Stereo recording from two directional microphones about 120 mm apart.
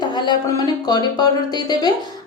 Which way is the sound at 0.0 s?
35° left (ahead or behind).